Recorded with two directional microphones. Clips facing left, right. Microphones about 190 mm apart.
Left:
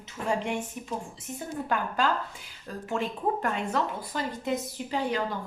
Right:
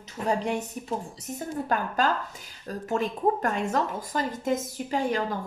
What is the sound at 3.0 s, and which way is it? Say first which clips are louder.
A woman's voice: right 3 dB; 45° right (ahead or behind).